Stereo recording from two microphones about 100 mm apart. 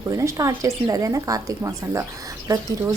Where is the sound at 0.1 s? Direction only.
30° right (ahead or behind).